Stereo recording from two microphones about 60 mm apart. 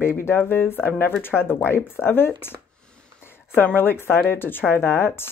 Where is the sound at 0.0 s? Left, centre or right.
Left.